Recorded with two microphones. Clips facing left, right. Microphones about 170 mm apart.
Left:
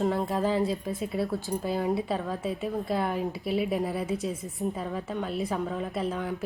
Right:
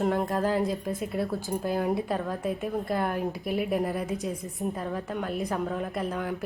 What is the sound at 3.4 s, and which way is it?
Speech, 50° right (ahead or behind).